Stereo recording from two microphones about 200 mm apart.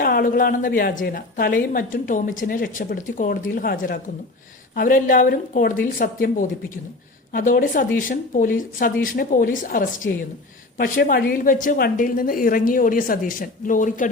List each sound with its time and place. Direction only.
0.0 s a man's voice: 45° left (ahead or behind)